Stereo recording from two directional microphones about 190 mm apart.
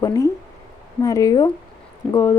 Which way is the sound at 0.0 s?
20° left (ahead or behind).